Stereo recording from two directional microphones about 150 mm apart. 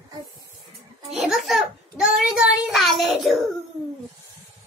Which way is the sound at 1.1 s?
Centre (ahead or behind).